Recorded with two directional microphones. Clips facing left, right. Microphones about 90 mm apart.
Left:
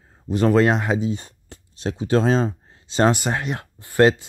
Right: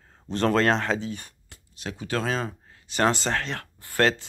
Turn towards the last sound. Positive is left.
turn(degrees=20)  # may be behind; listen again after turning